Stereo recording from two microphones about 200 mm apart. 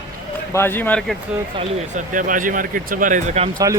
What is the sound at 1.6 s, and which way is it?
Speech, 40° right (ahead or behind).